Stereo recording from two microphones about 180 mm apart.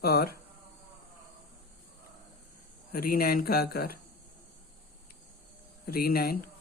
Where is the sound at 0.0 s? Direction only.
60° left (ahead or behind).